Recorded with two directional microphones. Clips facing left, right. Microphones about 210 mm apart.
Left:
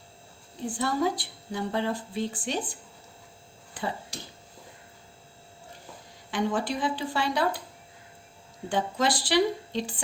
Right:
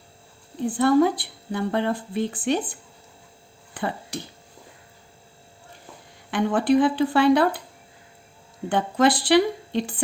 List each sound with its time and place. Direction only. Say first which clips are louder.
0.8 s a woman's voice: right 9 dB; 60° right (ahead or behind)
3.8 s speech: right 4 dB; 55° right (ahead or behind)
6.3 s a woman's voice: right 9 dB; 60° right (ahead or behind)
8.7 s a woman's voice: right 6 dB; 60° right (ahead or behind)